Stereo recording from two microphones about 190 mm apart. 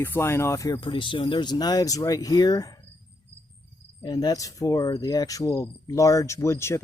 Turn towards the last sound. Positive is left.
turn(degrees=15)  # may be behind; listen again after turning